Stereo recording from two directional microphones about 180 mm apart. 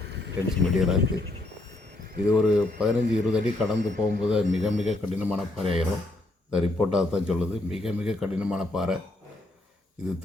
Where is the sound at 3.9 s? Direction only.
55° right (ahead or behind).